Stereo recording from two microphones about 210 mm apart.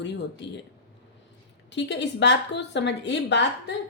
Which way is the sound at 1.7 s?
55° left (ahead or behind).